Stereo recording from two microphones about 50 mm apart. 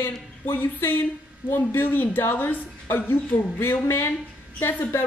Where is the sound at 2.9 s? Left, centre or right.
Left.